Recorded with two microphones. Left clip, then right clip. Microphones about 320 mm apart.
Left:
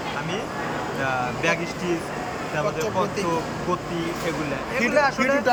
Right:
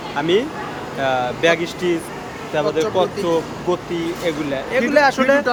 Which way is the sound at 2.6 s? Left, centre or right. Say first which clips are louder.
Right 7 dB; centre.